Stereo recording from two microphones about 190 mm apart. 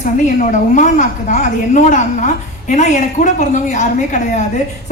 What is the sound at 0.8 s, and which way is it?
A woman's voice, 40° left (ahead or behind).